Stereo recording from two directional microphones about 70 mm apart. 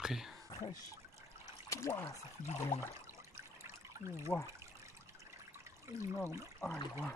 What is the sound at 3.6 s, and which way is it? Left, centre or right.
Trickle, right.